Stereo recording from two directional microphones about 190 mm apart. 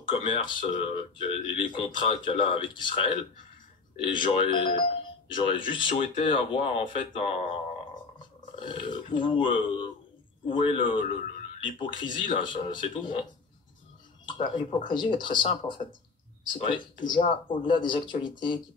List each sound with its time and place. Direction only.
0.0 s speech: 25° left (ahead or behind)
14.2 s speech: 25° left (ahead or behind)